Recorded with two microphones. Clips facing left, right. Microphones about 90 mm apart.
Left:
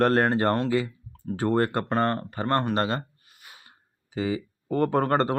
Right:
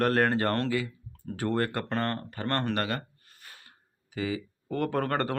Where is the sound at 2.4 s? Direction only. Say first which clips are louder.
Left 5 dB; 15° left (ahead or behind).